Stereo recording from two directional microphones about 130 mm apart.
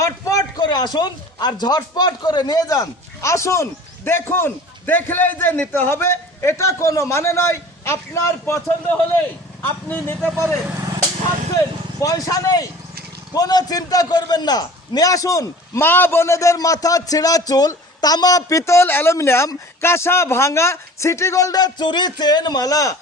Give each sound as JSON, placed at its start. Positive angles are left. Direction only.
{"t": 0.0, "sound": "a man's voice", "side_deg": 25}
{"t": 8.9, "sound": "speech", "side_deg": 15}
{"t": 10.3, "sound": "speech", "side_deg": -25}
{"t": 11.5, "sound": "a man's voice", "side_deg": 25}